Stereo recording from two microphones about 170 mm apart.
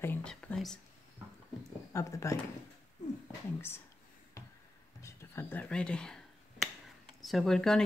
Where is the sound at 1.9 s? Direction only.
15° left (ahead or behind).